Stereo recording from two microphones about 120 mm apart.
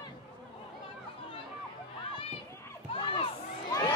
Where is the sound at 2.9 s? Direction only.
45° left (ahead or behind).